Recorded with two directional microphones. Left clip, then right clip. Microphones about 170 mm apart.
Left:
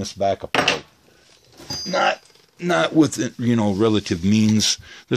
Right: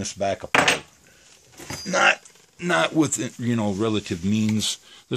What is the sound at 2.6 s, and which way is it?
Speech, 35° left (ahead or behind).